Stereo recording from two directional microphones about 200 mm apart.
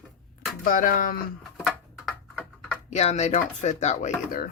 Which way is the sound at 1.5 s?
Centre (ahead or behind).